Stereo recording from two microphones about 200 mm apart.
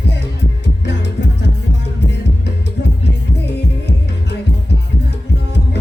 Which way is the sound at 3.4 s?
55° left (ahead or behind).